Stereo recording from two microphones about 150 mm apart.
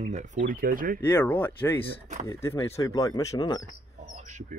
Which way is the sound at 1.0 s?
15° left (ahead or behind).